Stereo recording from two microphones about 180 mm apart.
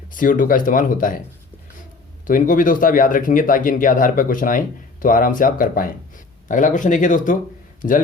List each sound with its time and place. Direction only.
0.1 s speech: 45° left (ahead or behind)
2.2 s a man's voice: 50° left (ahead or behind)